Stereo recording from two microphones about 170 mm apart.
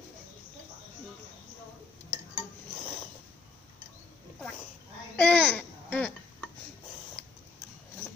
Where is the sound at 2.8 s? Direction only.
40° left (ahead or behind).